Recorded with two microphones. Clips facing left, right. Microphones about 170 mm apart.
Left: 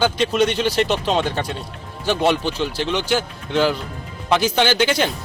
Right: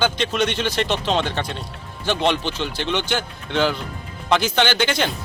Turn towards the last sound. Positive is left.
turn(degrees=10)  # may be behind; listen again after turning